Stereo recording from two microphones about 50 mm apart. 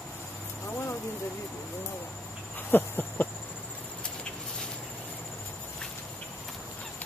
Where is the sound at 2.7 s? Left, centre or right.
Left.